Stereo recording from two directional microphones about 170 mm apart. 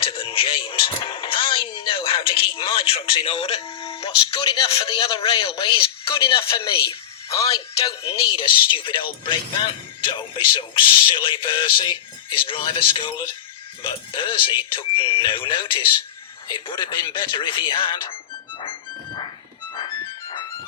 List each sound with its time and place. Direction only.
0.0 s speech: 30° left (ahead or behind)
8.0 s speech: 30° left (ahead or behind)
18.6 s music: 25° left (ahead or behind)